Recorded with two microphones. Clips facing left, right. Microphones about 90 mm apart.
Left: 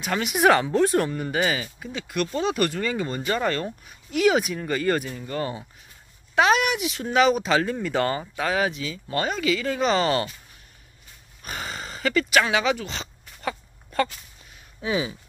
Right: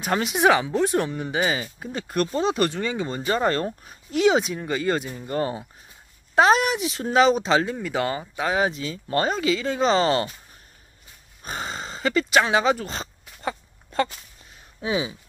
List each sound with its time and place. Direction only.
0.0 s speech: 30° right (ahead or behind)
0.5 s speech: 10° right (ahead or behind)
1.6 s speech: 35° right (ahead or behind); by 5.4 s 20° right (ahead or behind)
6.3 s speech: 35° right (ahead or behind)
7.7 s speech: 5° right (ahead or behind)
8.4 s speech: 20° right (ahead or behind)
11.4 s speech: 30° right (ahead or behind)
13.4 s a sound: 25° right (ahead or behind)
14.8 s speech: 20° right (ahead or behind)